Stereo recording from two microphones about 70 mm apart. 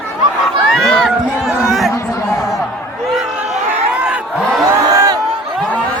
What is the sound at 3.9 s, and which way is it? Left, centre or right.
Crowd, centre.